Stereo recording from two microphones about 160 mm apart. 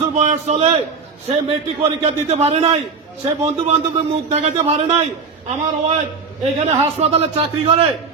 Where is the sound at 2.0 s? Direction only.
40° right (ahead or behind).